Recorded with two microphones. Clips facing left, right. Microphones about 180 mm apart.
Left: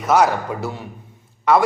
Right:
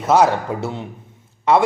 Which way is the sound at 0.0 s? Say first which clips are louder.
Right 1 dB; 25° right (ahead or behind).